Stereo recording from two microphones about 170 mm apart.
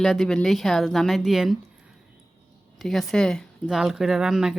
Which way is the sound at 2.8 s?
Centre (ahead or behind).